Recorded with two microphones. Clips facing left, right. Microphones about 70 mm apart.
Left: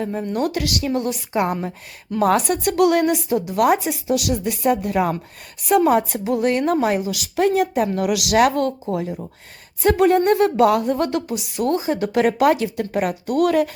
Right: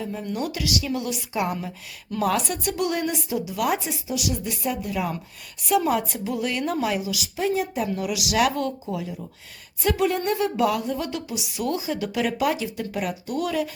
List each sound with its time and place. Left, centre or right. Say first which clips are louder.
0.0 s a woman's voice: left 6 dB; left